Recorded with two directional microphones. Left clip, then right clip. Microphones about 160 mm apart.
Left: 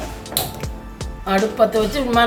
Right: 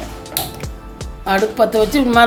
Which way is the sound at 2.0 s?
90° right.